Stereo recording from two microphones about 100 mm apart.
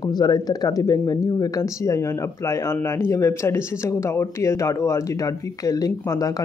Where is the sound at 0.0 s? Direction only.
45° left (ahead or behind).